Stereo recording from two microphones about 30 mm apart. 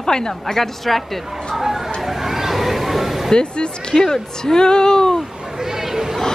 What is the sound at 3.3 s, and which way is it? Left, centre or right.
A woman's voice, left.